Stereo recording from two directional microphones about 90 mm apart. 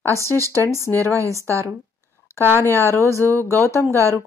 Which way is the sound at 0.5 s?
30° left (ahead or behind).